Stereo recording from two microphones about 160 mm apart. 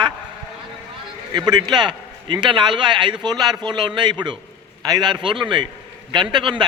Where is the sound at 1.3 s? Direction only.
25° right (ahead or behind).